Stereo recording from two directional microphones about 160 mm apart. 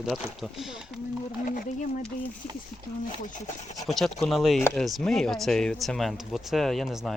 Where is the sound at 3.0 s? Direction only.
55° left (ahead or behind).